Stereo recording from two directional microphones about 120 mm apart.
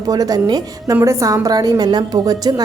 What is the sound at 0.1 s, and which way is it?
A woman's voice, 30° right (ahead or behind).